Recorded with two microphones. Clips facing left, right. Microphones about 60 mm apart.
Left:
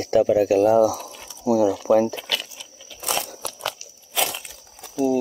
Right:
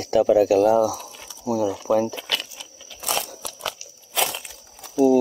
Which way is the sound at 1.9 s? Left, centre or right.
Left.